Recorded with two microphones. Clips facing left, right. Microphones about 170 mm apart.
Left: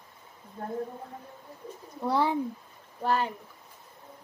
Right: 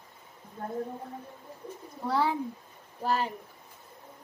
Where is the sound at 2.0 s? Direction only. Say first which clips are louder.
Left 1 dB; 15° left (ahead or behind).